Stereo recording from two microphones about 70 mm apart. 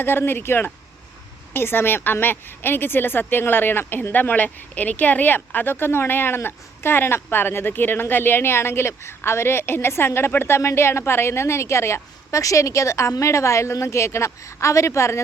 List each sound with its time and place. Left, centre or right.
0.0 s a woman's voice: left